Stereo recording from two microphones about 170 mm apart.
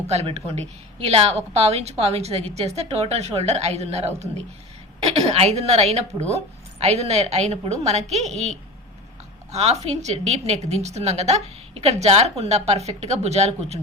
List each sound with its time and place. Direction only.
0.1 s a woman's voice: 40° right (ahead or behind)
9.5 s a woman's voice: 40° right (ahead or behind)